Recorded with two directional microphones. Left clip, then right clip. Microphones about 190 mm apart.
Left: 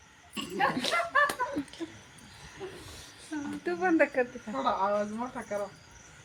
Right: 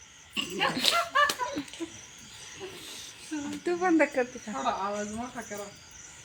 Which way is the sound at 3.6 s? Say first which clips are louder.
Right 1 dB; 60° right (ahead or behind).